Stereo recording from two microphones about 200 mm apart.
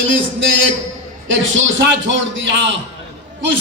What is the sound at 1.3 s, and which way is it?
A man's voice, 70° right (ahead or behind).